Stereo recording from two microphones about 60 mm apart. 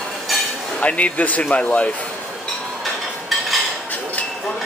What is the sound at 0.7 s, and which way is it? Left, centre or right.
Speech, left.